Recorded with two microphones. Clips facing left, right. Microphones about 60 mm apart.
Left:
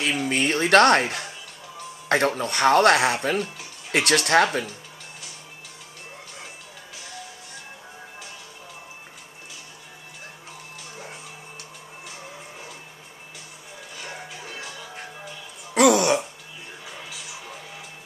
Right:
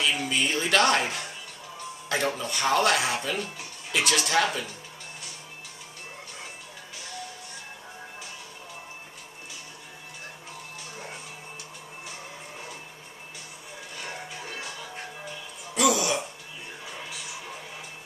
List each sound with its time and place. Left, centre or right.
0.0 s speech: left
12.1 s music: centre
13.9 s music: centre
15.7 s music: left
16.8 s music: centre